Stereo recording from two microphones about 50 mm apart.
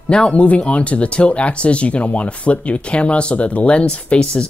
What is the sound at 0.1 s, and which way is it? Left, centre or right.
Speech, left.